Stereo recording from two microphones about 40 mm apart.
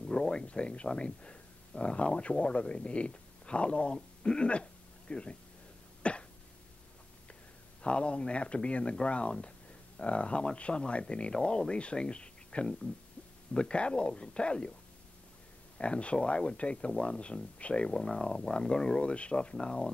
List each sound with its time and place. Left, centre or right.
0.0 s speech: centre
6.0 s cough: left
7.8 s speech: left
15.8 s speech: left